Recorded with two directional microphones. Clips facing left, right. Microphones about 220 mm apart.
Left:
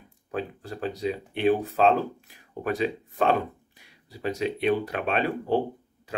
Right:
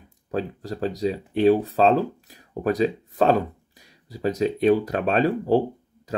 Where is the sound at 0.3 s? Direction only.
35° right (ahead or behind).